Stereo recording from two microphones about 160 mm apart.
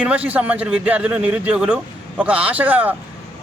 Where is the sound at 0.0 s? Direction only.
10° right (ahead or behind).